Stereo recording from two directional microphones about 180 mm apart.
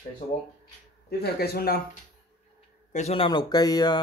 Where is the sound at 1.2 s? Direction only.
60° left (ahead or behind).